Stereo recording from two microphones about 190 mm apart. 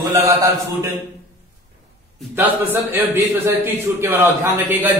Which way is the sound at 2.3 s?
10° right (ahead or behind).